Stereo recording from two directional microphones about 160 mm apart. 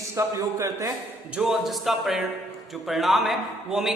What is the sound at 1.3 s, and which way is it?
A man's voice, 5° right (ahead or behind).